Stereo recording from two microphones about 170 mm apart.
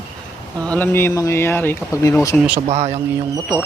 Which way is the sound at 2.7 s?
40° right (ahead or behind).